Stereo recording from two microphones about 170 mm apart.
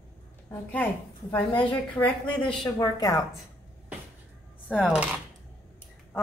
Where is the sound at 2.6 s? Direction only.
20° left (ahead or behind).